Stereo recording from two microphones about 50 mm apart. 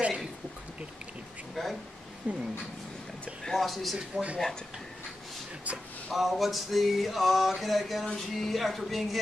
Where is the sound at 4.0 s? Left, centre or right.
Centre.